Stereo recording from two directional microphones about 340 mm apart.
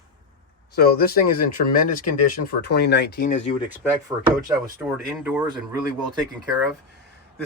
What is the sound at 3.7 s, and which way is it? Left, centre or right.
Speech, centre.